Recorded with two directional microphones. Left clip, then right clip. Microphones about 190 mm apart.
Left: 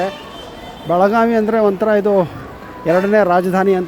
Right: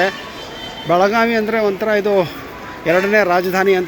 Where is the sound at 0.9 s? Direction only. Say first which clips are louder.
Left 1 dB; 25° left (ahead or behind).